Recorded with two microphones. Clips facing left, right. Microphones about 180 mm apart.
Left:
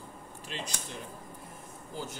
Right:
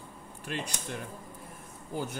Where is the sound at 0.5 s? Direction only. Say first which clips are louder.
Right 4 dB; 55° right (ahead or behind).